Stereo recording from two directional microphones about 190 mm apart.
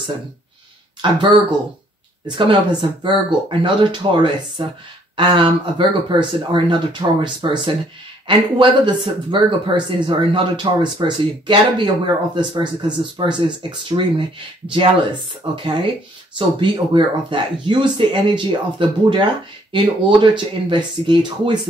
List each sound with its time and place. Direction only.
1.0 s speech: 25° right (ahead or behind)
2.2 s speech: 25° right (ahead or behind)